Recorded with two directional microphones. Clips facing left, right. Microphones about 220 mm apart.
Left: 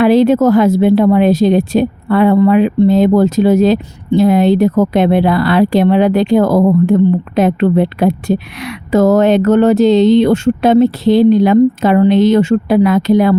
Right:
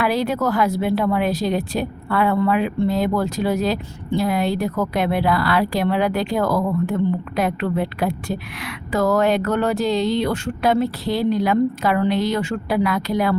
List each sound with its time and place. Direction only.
0.0 s a woman's voice: 25° left (ahead or behind)